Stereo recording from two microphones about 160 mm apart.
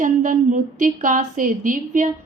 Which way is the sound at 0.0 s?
55° right (ahead or behind).